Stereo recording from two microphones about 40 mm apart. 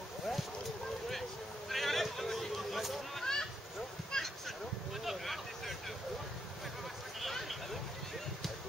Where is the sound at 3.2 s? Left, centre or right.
Centre.